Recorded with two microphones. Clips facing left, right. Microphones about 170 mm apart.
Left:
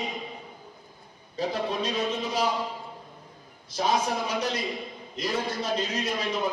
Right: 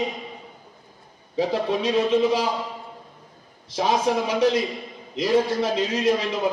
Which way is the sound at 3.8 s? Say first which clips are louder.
Right 5 dB; 90° right.